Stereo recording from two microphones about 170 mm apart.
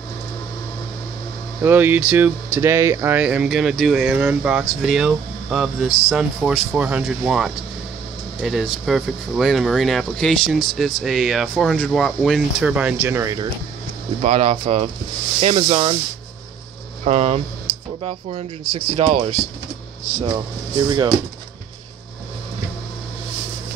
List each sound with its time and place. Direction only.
1.6 s speech: 10° right (ahead or behind)
14.2 s speech: 40° right (ahead or behind)
17.0 s speech: 40° right (ahead or behind)
18.7 s speech: 30° right (ahead or behind)
20.9 s speech: 25° right (ahead or behind)